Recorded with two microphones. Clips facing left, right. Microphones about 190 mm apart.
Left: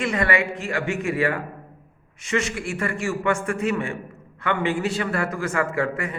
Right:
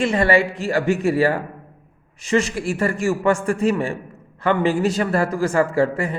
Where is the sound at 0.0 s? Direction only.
30° right (ahead or behind).